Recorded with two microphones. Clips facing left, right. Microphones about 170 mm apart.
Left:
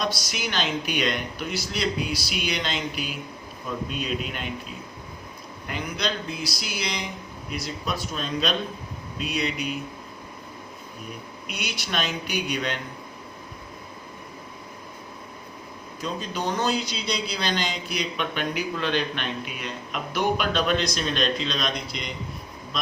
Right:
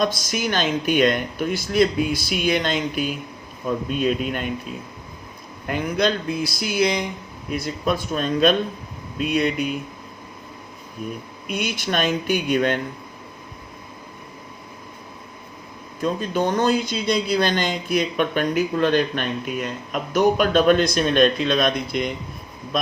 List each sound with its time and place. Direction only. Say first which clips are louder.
0.0 s speech: right 6 dB; 50° right (ahead or behind)
5.6 s speech: right 8 dB; 50° right (ahead or behind)
11.4 s speech: right 9 dB; 50° right (ahead or behind)
16.0 s speech: right 8 dB; 50° right (ahead or behind)